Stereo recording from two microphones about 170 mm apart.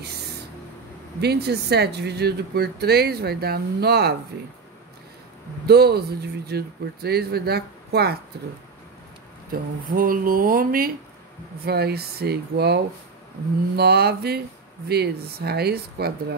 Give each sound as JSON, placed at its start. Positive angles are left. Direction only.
{"t": 1.2, "sound": "speech", "side_deg": -70}
{"t": 5.7, "sound": "speech", "side_deg": -70}
{"t": 9.5, "sound": "speech", "side_deg": -55}
{"t": 11.6, "sound": "speech", "side_deg": -70}